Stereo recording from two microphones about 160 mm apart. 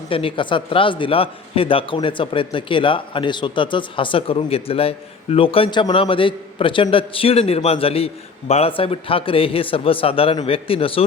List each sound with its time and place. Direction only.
0.1 s a man's voice: 35° left (ahead or behind)